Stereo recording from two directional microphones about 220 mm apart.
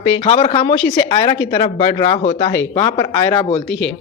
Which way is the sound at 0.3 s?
25° left (ahead or behind).